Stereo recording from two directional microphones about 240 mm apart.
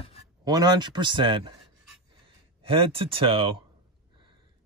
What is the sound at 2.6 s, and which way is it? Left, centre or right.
Speech, right.